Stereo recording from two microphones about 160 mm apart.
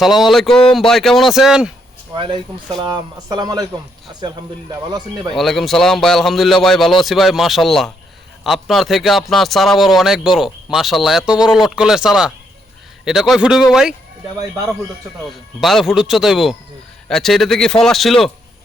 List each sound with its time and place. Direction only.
0.0 s a man's voice: centre (ahead or behind)
2.1 s speech: 30° right (ahead or behind)
4.7 s speech: 25° right (ahead or behind)
5.3 s a man's voice: centre (ahead or behind)
15.2 s a man's voice: centre (ahead or behind)